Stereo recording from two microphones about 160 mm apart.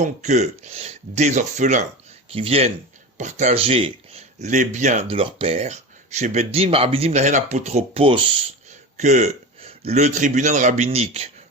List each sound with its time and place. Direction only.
0.0 s speech: 45° right (ahead or behind)
2.3 s speech: 35° right (ahead or behind)
5.1 s speech: 35° right (ahead or behind)
9.0 s a man's voice: 45° right (ahead or behind)